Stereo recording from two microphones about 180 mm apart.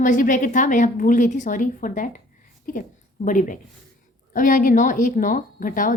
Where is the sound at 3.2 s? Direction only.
45° left (ahead or behind).